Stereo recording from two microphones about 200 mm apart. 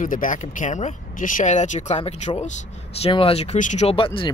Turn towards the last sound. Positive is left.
turn(degrees=25)  # may be behind; listen again after turning